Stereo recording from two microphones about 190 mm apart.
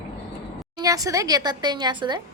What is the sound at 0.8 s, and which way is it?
Speech, 20° right (ahead or behind).